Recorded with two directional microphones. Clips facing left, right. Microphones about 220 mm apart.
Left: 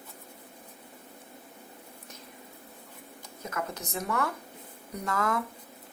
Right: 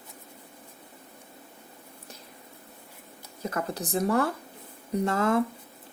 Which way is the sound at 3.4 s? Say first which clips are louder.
Right 5 dB; 35° right (ahead or behind).